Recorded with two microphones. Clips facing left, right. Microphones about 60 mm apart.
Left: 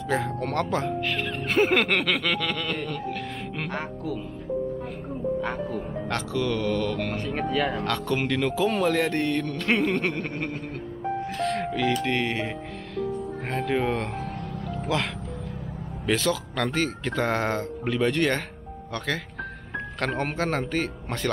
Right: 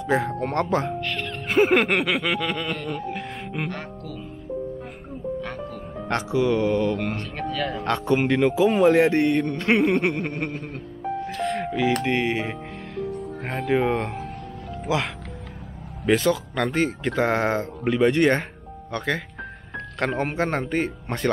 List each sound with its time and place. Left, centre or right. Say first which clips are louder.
0.0 s speech: right 3 dB; centre
3.7 s speech: left 4 dB; centre
5.4 s speech: left 3 dB; centre
6.0 s speech: right 6 dB; centre
7.2 s speech: left 2 dB; centre
7.8 s speech: right 4 dB; right
11.4 s a sound: right 2 dB; centre
12.0 s speech: right 3 dB; centre
16.1 s speech: right 5 dB; centre
18.9 s speech: right 3 dB; centre